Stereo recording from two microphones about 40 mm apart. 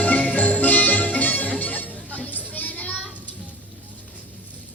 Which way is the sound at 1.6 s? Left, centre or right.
Left.